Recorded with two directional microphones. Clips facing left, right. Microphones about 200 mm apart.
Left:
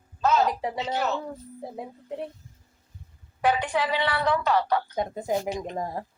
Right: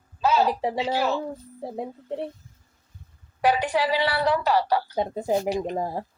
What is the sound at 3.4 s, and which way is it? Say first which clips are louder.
A woman's voice: right 2 dB; 35° right (ahead or behind).